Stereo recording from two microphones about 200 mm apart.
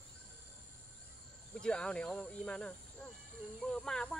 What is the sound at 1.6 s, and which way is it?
Speech, 5° left (ahead or behind).